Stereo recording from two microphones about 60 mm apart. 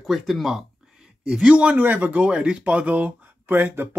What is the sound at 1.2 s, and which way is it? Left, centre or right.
Speech, centre.